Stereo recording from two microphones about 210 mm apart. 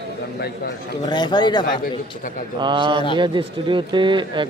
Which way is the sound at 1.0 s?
20° left (ahead or behind).